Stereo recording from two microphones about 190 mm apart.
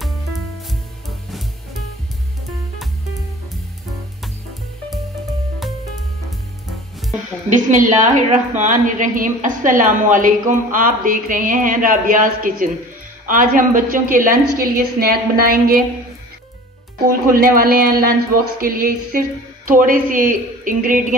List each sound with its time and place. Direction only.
0.0 s music: centre (ahead or behind)
7.4 s a woman's voice: 40° right (ahead or behind)
17.1 s a woman's voice: 50° right (ahead or behind)